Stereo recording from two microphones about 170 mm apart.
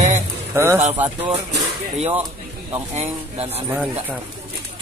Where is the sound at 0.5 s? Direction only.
15° right (ahead or behind).